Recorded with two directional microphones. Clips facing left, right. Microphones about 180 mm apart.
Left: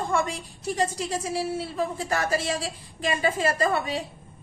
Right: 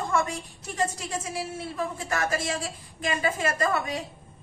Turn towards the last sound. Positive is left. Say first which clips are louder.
# left 2 dB
turn(degrees=30)  # may be behind; listen again after turning